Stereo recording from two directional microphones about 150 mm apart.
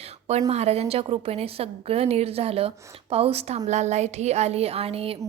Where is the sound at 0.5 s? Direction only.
45° right (ahead or behind).